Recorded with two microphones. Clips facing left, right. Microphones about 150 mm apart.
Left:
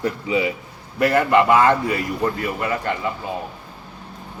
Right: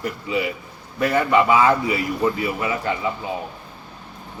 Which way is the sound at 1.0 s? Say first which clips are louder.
Left 2 dB; 5° left (ahead or behind).